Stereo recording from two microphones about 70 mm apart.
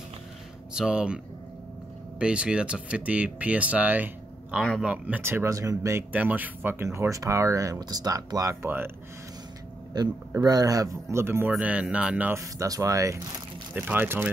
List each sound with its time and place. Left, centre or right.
0.7 s speech: centre
5.2 s speech: right
5.5 s speech: right
6.1 s speech: right
6.9 s speech: right
7.8 s speech: right
8.6 s speech: right
9.9 s a man's voice: right
10.4 s speech: right
11.6 s speech: centre
12.4 s speech: right
13.7 s speech: right